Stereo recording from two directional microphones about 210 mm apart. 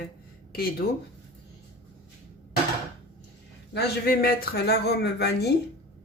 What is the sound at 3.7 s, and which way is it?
Speech, 50° left (ahead or behind).